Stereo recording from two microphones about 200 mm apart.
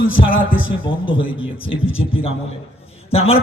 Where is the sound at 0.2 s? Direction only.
45° left (ahead or behind).